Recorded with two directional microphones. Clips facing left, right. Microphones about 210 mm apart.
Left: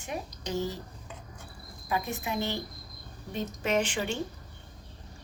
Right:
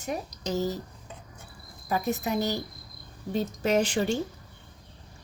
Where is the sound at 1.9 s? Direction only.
40° right (ahead or behind).